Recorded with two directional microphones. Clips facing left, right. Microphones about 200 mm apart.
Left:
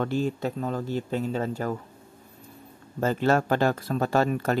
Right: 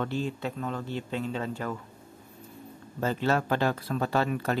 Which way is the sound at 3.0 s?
45° left (ahead or behind).